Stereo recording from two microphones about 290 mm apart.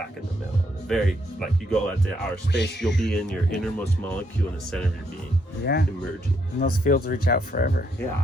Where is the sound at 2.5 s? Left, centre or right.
Left.